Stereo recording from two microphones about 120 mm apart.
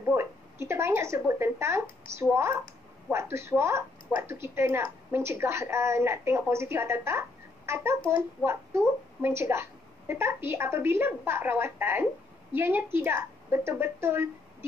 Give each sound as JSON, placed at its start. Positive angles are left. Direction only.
{"t": 0.1, "sound": "a woman's voice", "side_deg": -20}